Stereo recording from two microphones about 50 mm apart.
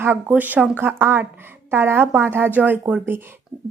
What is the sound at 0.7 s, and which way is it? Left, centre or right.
A woman's voice, right.